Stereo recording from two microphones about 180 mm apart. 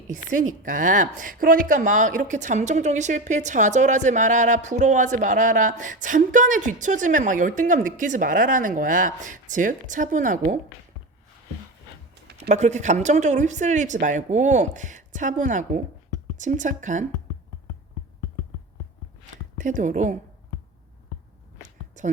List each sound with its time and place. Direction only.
0.1 s a woman's voice: 45° right (ahead or behind)
12.4 s a woman's voice: 40° right (ahead or behind)
19.5 s speech: 45° right (ahead or behind)
21.6 s a sound: 45° right (ahead or behind)